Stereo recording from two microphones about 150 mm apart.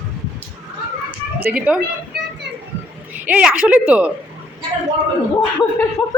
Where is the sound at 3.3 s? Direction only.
5° right (ahead or behind).